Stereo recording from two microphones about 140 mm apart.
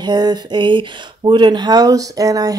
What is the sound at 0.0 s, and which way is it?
Speech, 30° right (ahead or behind).